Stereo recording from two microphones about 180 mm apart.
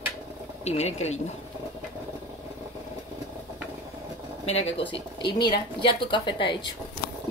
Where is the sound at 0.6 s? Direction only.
40° left (ahead or behind).